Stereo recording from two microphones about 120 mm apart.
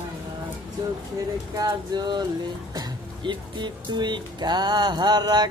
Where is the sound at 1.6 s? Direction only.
35° right (ahead or behind).